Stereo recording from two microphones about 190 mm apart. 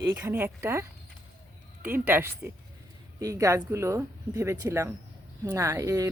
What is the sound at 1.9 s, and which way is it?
Speech, 10° right (ahead or behind).